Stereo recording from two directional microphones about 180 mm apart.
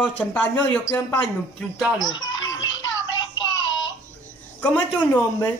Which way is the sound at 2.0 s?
90° left.